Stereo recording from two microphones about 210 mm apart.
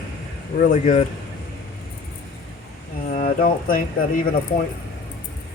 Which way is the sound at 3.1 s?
40° left (ahead or behind).